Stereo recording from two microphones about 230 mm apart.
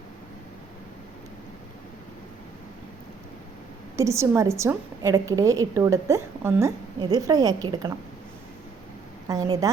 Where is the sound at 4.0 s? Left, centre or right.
Centre.